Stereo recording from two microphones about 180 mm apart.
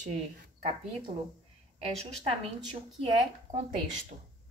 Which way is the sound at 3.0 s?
35° right (ahead or behind).